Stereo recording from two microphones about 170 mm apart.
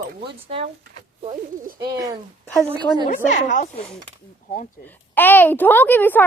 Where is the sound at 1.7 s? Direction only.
20° right (ahead or behind).